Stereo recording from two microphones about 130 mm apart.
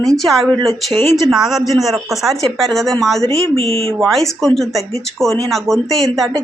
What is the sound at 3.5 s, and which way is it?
Speech, 50° right (ahead or behind).